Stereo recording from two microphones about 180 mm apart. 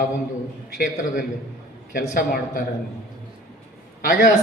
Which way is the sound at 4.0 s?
55° left (ahead or behind).